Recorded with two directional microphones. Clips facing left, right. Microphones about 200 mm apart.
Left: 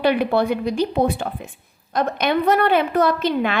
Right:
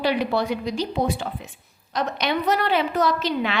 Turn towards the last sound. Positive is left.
turn(degrees=50)  # may be behind; listen again after turning